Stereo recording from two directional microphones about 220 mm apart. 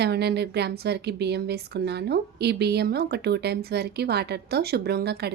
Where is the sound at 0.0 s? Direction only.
50° right (ahead or behind).